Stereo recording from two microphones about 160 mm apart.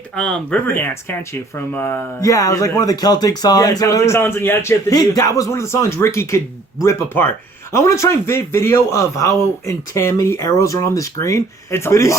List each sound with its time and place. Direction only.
0.2 s speech: 5° left (ahead or behind)